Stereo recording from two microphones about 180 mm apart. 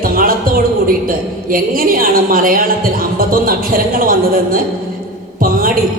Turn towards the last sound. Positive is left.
turn(degrees=-55)  # may be behind; listen again after turning